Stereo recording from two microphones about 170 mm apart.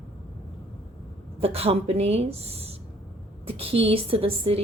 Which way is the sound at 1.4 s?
35° right (ahead or behind).